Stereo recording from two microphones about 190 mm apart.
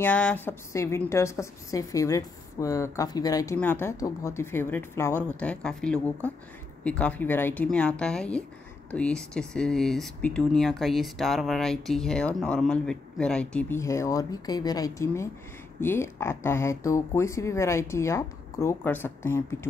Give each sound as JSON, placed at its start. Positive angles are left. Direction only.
{"t": 0.0, "sound": "speech", "side_deg": 5}